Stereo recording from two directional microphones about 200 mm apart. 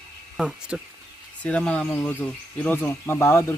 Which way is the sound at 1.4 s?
5° left (ahead or behind).